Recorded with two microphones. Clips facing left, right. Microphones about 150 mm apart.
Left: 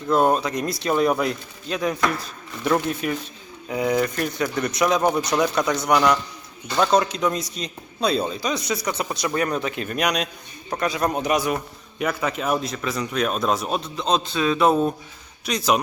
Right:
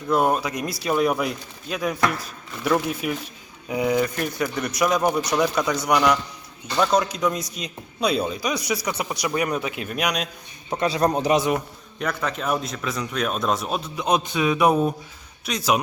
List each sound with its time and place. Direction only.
0.1 s a man's voice: 10° right (ahead or behind)
3.7 s a man's voice: 20° right (ahead or behind)
3.9 s a man's voice: 5° right (ahead or behind)
10.7 s a man's voice: 25° right (ahead or behind)
11.9 s speech: 5° left (ahead or behind)